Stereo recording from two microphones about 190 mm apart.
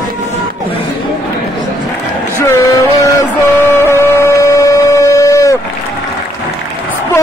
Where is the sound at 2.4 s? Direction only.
15° left (ahead or behind).